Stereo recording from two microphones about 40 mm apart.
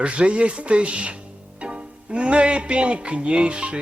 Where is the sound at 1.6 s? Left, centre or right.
Right.